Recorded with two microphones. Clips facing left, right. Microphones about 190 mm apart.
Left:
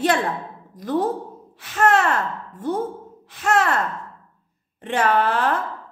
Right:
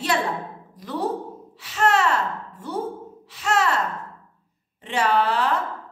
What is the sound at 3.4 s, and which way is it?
Speech, 50° left (ahead or behind).